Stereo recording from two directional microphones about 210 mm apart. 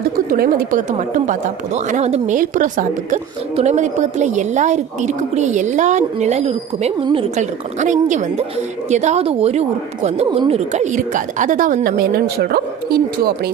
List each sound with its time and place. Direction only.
0.3 s a woman's voice: 45° right (ahead or behind)